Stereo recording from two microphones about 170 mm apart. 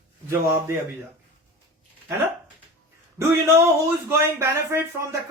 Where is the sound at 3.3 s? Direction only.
15° right (ahead or behind).